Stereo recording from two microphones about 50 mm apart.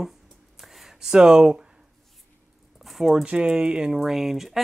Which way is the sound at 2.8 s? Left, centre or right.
Centre.